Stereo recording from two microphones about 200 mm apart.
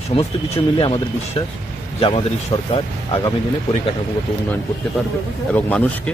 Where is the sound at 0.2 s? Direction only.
25° left (ahead or behind).